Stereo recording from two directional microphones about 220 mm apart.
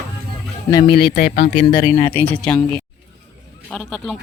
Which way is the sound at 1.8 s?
15° left (ahead or behind).